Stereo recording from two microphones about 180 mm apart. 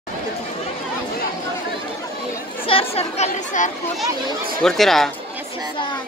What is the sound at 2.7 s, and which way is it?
Speech, 30° left (ahead or behind).